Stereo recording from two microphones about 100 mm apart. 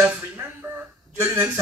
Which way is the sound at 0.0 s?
15° right (ahead or behind).